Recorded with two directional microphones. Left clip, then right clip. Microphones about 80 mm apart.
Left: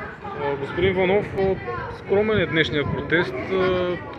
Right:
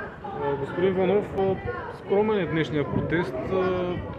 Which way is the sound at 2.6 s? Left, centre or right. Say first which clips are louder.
Left 5 dB; right.